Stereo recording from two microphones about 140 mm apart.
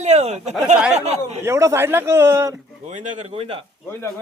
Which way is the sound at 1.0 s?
50° right (ahead or behind).